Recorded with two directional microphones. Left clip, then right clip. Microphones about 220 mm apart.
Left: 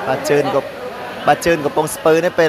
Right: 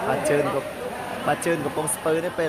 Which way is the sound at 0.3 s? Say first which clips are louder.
Left 7 dB; 20° left (ahead or behind).